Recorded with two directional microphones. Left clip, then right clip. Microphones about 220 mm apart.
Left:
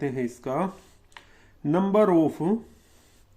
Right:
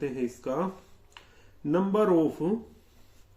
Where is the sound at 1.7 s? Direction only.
45° left (ahead or behind).